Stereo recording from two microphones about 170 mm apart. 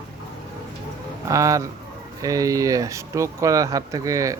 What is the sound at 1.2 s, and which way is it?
Speech, 20° right (ahead or behind).